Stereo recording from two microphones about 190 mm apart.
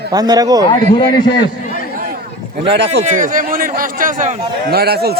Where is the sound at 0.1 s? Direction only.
20° right (ahead or behind).